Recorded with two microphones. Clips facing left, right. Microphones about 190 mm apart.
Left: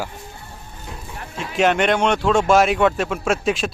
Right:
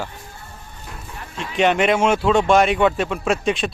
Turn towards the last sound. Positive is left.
turn(degrees=0)  # may be behind; listen again after turning